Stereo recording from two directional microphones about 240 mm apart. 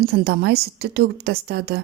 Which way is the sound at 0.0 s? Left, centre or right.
Right.